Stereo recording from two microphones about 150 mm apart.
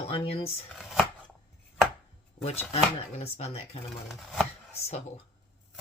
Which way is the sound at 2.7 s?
45° left (ahead or behind).